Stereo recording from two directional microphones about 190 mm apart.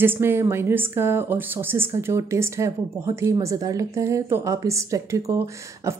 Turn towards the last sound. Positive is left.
turn(degrees=-15)  # may be behind; listen again after turning